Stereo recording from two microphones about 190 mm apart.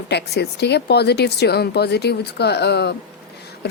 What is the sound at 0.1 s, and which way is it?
A woman's voice, 60° left (ahead or behind).